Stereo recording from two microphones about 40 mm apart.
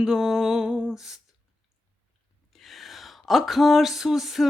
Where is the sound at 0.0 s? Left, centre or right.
Centre.